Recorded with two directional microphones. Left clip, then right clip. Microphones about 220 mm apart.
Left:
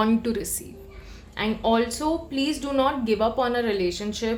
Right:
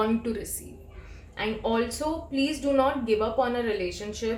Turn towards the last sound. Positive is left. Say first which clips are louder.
# left 4 dB
turn(degrees=45)  # may be behind; listen again after turning